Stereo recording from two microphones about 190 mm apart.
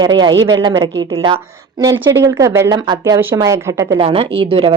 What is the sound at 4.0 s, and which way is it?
Speech, 30° right (ahead or behind).